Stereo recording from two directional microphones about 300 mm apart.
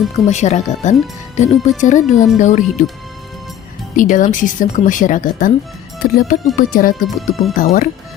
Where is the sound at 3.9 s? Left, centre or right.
Left.